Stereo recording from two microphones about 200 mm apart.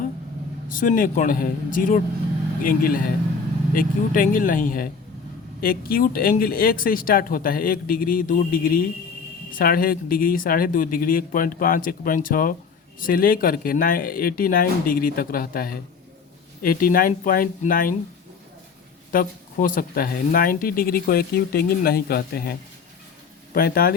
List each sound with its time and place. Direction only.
0.7 s speech: 40° left (ahead or behind)
19.1 s speech: 45° left (ahead or behind)
23.6 s speech: 50° left (ahead or behind)